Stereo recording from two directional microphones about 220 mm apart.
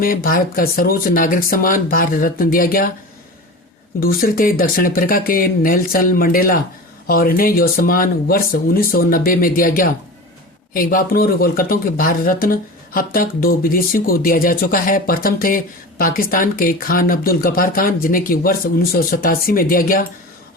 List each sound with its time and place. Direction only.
0.0 s speech: 40° left (ahead or behind)
4.0 s speech: 40° left (ahead or behind)